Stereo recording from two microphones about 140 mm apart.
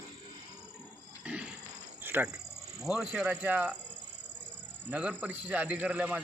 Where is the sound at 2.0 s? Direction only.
15° right (ahead or behind).